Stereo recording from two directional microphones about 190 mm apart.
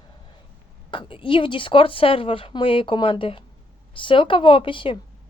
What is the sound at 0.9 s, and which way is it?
Speech, 25° left (ahead or behind).